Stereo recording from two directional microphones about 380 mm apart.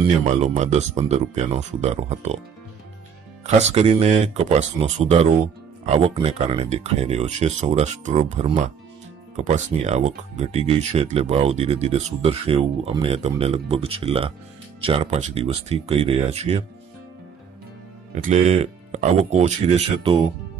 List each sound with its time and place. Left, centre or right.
0.0 s speech: centre
3.4 s speech: centre
18.1 s speech: centre